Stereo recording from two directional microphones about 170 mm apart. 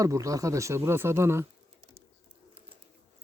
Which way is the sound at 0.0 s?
20° right (ahead or behind).